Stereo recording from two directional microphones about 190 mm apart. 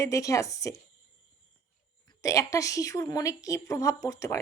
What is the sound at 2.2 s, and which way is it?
Speech, 15° left (ahead or behind).